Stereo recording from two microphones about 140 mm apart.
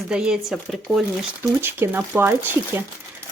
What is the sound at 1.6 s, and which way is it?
Speech, 15° right (ahead or behind).